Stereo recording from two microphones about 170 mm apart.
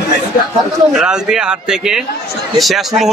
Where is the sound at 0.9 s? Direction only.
5° right (ahead or behind).